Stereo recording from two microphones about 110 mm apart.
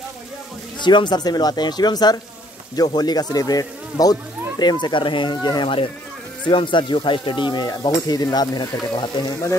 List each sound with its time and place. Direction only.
0.7 s speech: 45° left (ahead or behind)
6.4 s sizzle: 45° left (ahead or behind)